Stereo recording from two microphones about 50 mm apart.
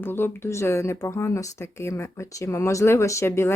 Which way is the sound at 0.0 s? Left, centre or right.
Left.